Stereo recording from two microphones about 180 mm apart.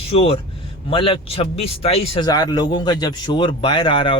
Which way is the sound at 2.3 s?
20° left (ahead or behind).